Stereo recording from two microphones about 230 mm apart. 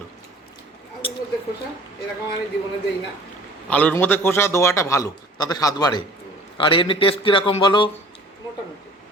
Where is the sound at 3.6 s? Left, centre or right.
Centre.